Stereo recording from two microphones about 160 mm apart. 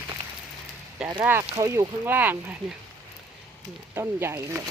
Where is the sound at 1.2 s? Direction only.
15° right (ahead or behind).